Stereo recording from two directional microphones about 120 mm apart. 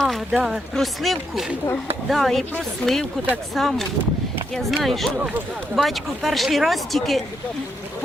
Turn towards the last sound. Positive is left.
turn(degrees=0)  # may be behind; listen again after turning